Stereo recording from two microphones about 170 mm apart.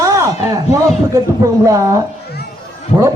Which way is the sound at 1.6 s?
20° right (ahead or behind).